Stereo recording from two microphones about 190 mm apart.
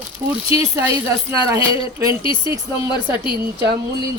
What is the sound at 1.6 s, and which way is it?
Speech, 25° left (ahead or behind).